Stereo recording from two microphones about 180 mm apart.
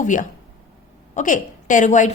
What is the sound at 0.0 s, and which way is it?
A woman's voice, 45° left (ahead or behind).